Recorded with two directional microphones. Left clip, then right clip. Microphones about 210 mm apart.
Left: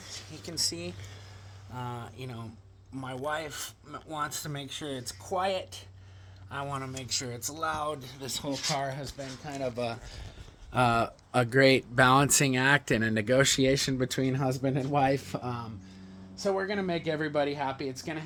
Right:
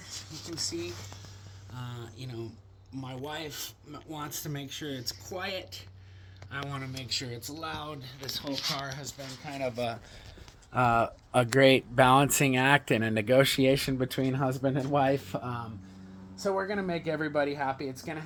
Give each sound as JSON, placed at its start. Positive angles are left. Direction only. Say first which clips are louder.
{"t": 1.7, "sound": "speech", "louder": "left 6 dB", "side_deg": 55}
{"t": 9.0, "sound": "speech", "louder": "left 1 dB", "side_deg": 30}
{"t": 16.4, "sound": "speech", "louder": "left 1 dB", "side_deg": 10}